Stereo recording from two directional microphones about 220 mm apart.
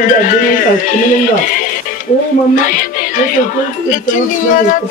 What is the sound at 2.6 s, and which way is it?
Speech, 35° left (ahead or behind).